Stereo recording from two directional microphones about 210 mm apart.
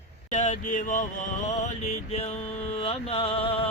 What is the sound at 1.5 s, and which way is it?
Mantra, 30° left (ahead or behind).